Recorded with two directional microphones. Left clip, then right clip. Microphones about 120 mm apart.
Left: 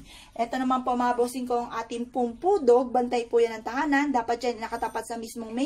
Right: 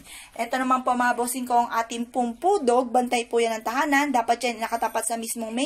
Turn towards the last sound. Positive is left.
turn(degrees=-35)  # may be behind; listen again after turning